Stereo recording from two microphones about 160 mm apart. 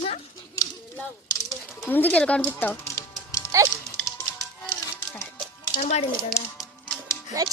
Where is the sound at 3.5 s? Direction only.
20° right (ahead or behind).